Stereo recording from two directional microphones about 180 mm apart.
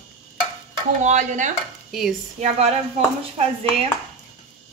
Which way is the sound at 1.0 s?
45° right (ahead or behind).